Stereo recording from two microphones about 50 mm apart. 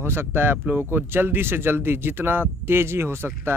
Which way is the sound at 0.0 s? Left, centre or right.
Right.